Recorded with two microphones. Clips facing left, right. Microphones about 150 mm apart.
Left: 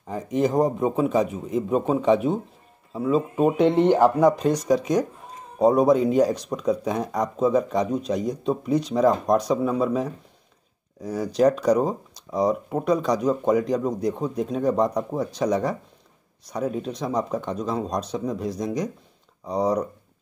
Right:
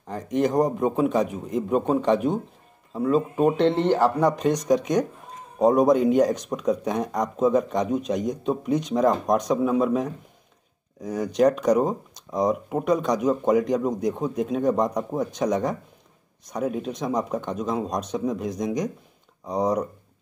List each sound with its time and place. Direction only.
0.0 s speech: 5° left (ahead or behind)